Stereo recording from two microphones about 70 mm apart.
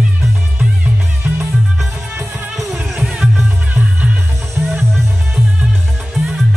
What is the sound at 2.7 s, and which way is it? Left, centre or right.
Music, centre.